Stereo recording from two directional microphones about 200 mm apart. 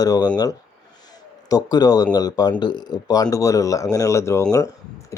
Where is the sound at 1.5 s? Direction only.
20° left (ahead or behind).